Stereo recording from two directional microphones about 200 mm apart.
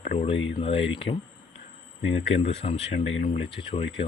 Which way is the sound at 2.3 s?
30° left (ahead or behind).